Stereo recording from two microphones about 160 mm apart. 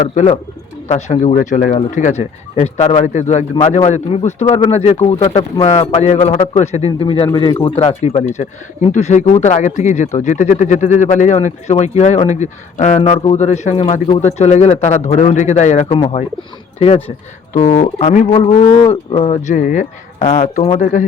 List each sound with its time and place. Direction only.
0.0 s speech: 45° left (ahead or behind)
17.5 s speech: 55° left (ahead or behind)
18.3 s speech: 40° left (ahead or behind); by 20.2 s 55° left (ahead or behind)
20.4 s speech: 40° left (ahead or behind)